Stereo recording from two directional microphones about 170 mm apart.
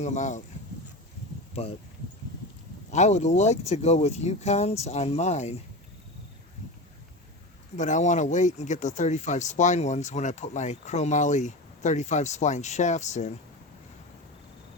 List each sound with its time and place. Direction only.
0.0 s speech: 45° left (ahead or behind)
2.9 s speech: 45° left (ahead or behind)
7.8 s speech: 45° left (ahead or behind)